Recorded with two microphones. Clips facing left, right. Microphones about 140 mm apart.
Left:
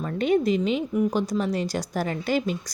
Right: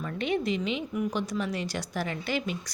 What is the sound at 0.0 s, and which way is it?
Speech, 40° left (ahead or behind).